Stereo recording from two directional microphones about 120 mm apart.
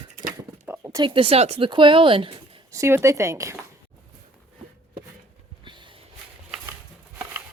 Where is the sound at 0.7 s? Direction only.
15° right (ahead or behind).